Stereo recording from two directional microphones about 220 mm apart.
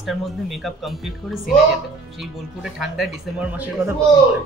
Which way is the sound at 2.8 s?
Centre (ahead or behind).